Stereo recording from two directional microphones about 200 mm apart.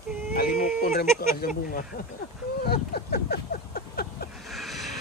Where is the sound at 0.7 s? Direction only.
45° left (ahead or behind).